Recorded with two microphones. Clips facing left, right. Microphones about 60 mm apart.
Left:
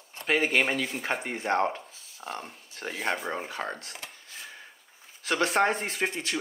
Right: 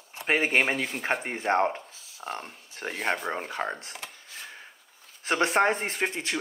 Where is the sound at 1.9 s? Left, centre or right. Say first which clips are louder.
Right 1 dB; centre.